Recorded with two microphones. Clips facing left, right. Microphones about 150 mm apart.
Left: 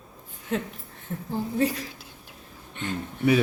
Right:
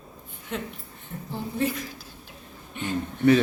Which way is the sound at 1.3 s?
40° left (ahead or behind).